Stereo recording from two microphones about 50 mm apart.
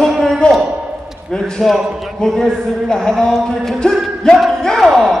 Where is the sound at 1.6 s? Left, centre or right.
Centre.